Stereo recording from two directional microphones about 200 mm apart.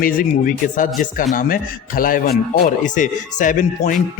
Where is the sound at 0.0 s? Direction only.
45° left (ahead or behind).